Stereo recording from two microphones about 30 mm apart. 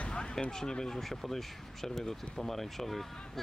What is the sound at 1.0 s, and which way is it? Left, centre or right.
Speech, centre.